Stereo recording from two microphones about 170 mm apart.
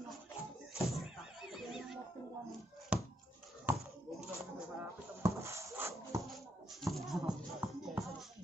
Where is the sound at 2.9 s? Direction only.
5° right (ahead or behind).